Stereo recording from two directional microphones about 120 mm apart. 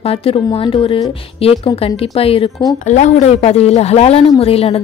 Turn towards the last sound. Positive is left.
turn(degrees=55)  # may be behind; listen again after turning